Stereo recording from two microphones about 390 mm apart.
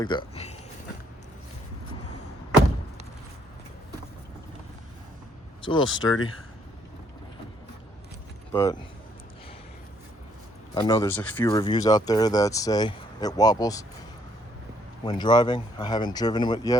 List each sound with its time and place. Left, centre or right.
0.0 s speech: centre
5.6 s speech: centre
5.9 s speech: left
8.5 s speech: centre
10.8 s speech: centre
15.0 s speech: centre